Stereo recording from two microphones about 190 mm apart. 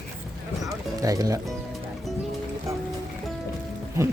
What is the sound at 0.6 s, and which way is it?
Music, 15° right (ahead or behind).